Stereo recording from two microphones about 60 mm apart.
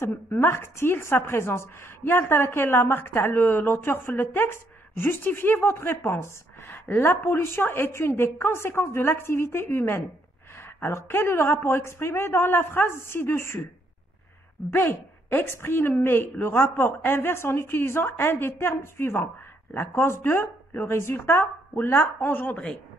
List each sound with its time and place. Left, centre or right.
0.0 s a woman's voice: left
14.7 s a woman's voice: left